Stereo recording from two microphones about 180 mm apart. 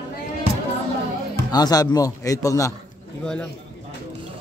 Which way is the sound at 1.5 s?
20° left (ahead or behind).